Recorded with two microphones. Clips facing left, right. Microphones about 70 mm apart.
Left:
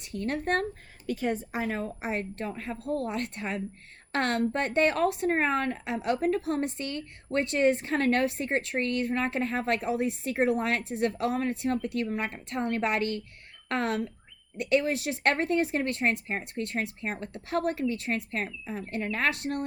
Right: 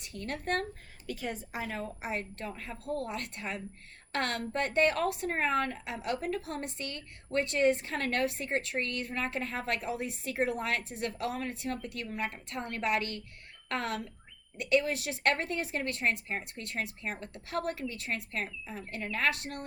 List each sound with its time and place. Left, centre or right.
0.3 s speech: left